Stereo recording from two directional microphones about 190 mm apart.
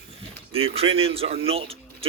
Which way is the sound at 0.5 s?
30° right (ahead or behind).